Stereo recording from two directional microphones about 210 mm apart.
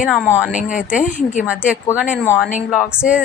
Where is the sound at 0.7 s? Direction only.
35° left (ahead or behind).